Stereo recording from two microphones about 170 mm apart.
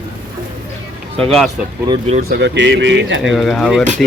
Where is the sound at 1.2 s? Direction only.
Centre (ahead or behind).